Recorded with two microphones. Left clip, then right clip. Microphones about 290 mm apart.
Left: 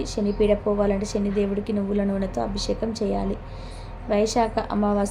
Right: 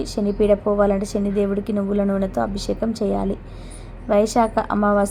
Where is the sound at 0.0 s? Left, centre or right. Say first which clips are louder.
Right 2 dB; centre.